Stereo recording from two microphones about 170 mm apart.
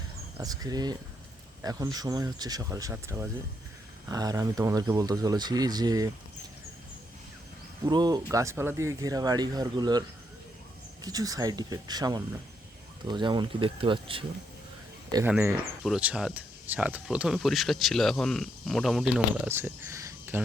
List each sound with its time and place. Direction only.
0.3 s speech: 20° right (ahead or behind)
7.9 s speech: 25° right (ahead or behind)
11.0 s speech: 20° right (ahead or behind)
15.4 s speech: 15° right (ahead or behind)
15.8 s speech: 5° right (ahead or behind)
19.5 s a sound: 15° right (ahead or behind)